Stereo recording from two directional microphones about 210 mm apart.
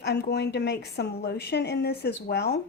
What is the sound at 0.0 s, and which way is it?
A woman's voice, 50° left (ahead or behind).